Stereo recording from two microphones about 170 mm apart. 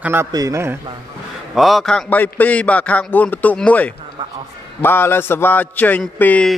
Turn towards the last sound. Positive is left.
turn(degrees=5)  # may be behind; listen again after turning